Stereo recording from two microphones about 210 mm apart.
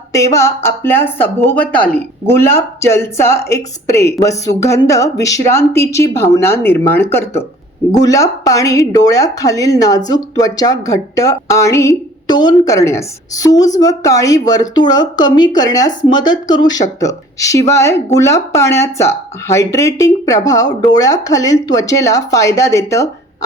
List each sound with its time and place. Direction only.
0.1 s speech: 15° left (ahead or behind)